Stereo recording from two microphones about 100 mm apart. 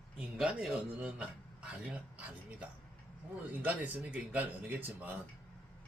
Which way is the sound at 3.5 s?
15° right (ahead or behind).